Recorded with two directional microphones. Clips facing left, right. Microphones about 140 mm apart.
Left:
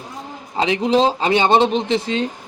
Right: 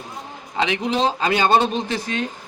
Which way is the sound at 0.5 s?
35° left (ahead or behind).